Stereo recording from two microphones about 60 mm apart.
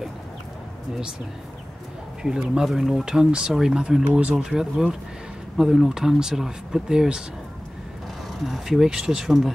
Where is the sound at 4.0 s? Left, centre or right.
Right.